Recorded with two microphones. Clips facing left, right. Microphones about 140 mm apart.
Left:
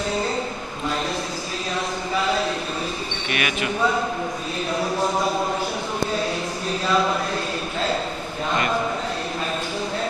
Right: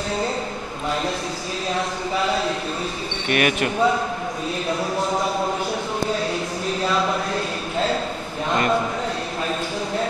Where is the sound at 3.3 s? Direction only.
45° right (ahead or behind).